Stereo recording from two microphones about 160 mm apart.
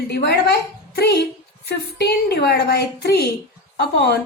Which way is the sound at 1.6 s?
90° left.